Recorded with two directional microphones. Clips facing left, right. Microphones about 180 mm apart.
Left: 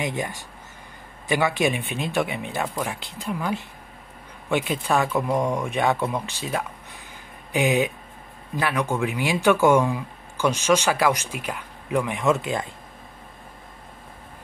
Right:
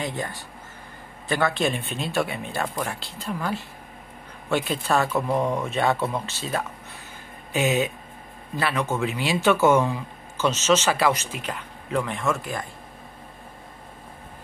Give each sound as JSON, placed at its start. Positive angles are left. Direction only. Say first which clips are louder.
{"t": 0.0, "sound": "speech", "louder": "left 2 dB", "side_deg": 15}
{"t": 1.3, "sound": "speech", "louder": "left 2 dB", "side_deg": 10}